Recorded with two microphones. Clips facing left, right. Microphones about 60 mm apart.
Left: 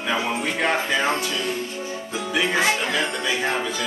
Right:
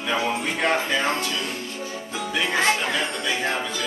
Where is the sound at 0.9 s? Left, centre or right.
Centre.